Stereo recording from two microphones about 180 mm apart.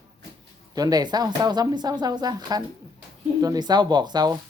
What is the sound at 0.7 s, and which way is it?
Speech, 20° right (ahead or behind).